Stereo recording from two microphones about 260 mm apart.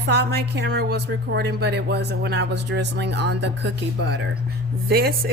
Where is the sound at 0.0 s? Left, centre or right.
Right.